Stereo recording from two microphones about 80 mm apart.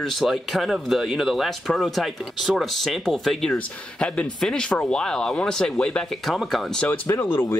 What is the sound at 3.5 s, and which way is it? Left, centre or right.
Speech, centre.